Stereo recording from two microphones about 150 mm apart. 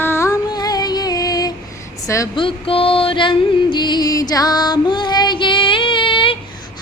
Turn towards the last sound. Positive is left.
turn(degrees=35)  # may be behind; listen again after turning